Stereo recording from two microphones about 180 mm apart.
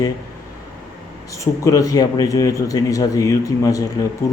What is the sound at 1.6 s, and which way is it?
Speech, 20° left (ahead or behind).